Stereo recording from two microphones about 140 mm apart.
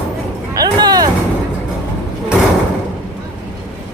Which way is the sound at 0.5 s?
30° right (ahead or behind).